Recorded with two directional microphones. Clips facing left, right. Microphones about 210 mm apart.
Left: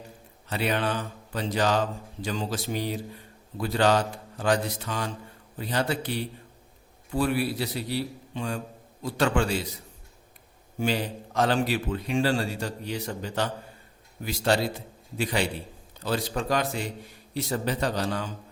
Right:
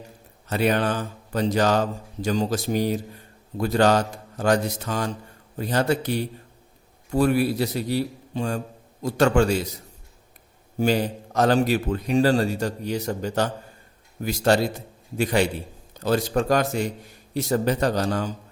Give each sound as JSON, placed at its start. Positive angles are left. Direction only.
{"t": 0.4, "sound": "a man's voice", "side_deg": -45}
{"t": 10.8, "sound": "a man's voice", "side_deg": -45}